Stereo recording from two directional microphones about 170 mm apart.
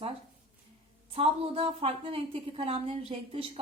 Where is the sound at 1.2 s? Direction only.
35° right (ahead or behind).